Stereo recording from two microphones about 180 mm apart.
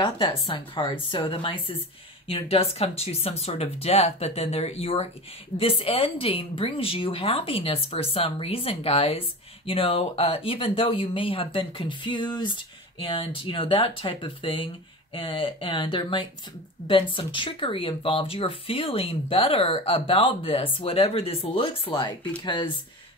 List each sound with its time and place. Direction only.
0.0 s speech: 30° left (ahead or behind)